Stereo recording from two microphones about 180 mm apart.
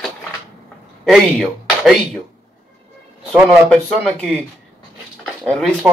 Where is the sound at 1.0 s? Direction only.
Centre (ahead or behind).